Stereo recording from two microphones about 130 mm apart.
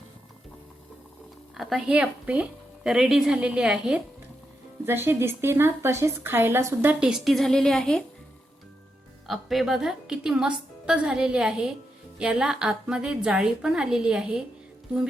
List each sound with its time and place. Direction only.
1.5 s speech: 5° right (ahead or behind)
4.9 s a woman's voice: 15° right (ahead or behind)
7.0 s a woman's voice: centre (ahead or behind)
9.2 s a woman's voice: centre (ahead or behind)